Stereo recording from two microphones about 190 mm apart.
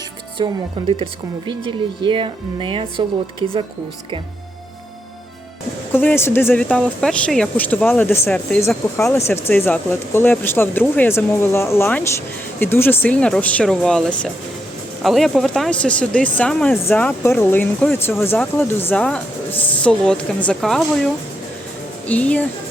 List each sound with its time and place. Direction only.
0.4 s a woman's voice: 25° right (ahead or behind)
5.9 s speech: 10° left (ahead or behind)